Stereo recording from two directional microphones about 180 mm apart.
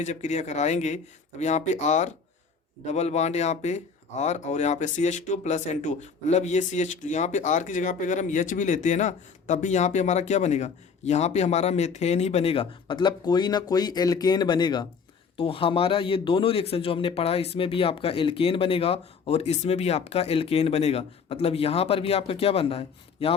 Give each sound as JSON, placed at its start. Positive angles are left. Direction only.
{"t": 0.0, "sound": "speech", "side_deg": 40}